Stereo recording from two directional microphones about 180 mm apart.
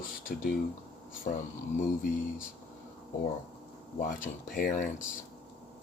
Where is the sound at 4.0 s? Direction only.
50° left (ahead or behind).